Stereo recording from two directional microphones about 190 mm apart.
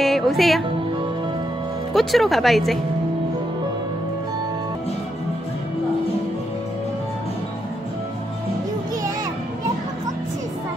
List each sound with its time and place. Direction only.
0.0 s speech: centre (ahead or behind)
2.0 s speech: centre (ahead or behind)